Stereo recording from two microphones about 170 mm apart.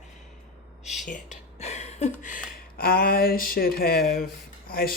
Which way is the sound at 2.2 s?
50° left (ahead or behind).